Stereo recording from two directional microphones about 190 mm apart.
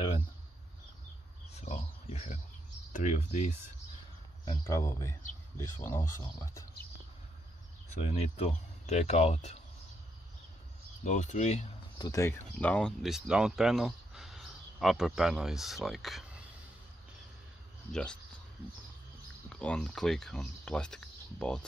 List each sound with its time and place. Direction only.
1.5 s a sound: 35° left (ahead or behind)
2.9 s speech: 40° left (ahead or behind)
4.5 s speech: 15° left (ahead or behind)
8.1 s speech: 35° left (ahead or behind)
11.1 s speech: 40° left (ahead or behind)
12.0 s speech: 15° left (ahead or behind); by 16.4 s centre (ahead or behind)
19.5 s speech: 5° left (ahead or behind)